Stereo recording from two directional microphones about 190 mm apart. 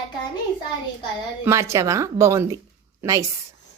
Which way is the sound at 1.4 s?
15° right (ahead or behind).